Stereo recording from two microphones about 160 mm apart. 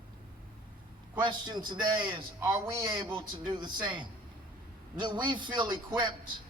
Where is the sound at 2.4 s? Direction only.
15° right (ahead or behind).